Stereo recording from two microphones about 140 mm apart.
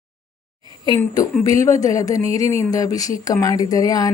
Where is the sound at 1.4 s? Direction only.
25° left (ahead or behind).